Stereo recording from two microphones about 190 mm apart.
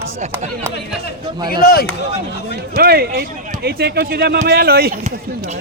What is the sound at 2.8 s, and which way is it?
Speech, 55° right (ahead or behind).